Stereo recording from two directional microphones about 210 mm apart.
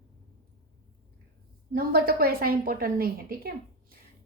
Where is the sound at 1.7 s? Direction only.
45° right (ahead or behind).